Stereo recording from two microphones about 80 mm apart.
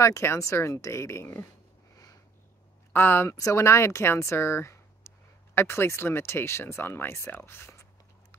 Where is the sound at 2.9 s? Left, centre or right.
Left.